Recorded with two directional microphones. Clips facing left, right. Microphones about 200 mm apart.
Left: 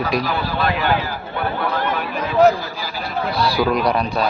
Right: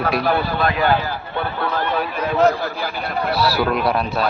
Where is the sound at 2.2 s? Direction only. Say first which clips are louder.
Left 3 dB; 60° right (ahead or behind).